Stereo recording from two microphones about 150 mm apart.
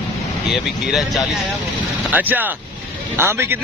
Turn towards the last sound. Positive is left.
turn(degrees=-15)  # may be behind; listen again after turning